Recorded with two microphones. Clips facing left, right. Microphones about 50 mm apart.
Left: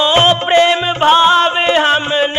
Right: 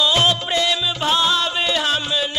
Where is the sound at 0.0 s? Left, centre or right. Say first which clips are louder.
Left 6 dB; left.